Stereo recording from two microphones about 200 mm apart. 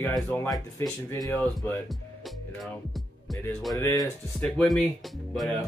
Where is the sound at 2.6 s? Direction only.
Centre (ahead or behind).